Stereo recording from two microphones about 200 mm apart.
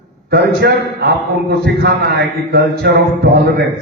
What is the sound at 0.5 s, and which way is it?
A man's voice, 55° right (ahead or behind).